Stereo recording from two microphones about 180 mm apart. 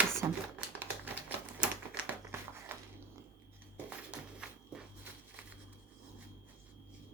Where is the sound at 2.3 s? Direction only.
15° right (ahead or behind).